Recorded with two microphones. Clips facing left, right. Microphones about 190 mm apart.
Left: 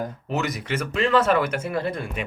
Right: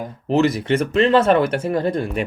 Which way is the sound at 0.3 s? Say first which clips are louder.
Right 11 dB; 30° right (ahead or behind).